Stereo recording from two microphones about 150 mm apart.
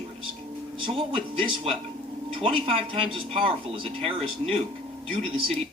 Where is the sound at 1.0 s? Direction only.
35° right (ahead or behind).